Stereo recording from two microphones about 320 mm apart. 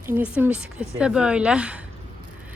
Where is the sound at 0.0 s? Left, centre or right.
Centre.